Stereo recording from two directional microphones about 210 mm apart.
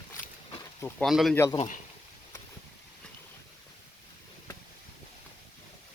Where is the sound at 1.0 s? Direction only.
Centre (ahead or behind).